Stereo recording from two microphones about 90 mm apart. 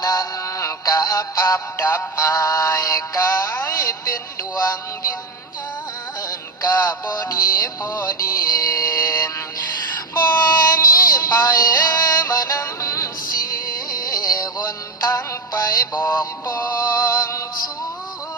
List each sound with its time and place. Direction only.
0.0 s synthetic singing: 40° left (ahead or behind)
1.8 s music: 25° left (ahead or behind)
2.1 s synthetic singing: 35° left (ahead or behind)
6.7 s music: 45° left (ahead or behind)
10.6 s music: 40° left (ahead or behind)